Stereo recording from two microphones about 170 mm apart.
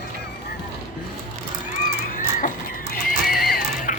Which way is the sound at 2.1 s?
55° left (ahead or behind).